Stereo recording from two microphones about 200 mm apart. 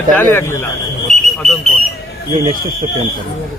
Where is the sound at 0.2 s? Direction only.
10° left (ahead or behind).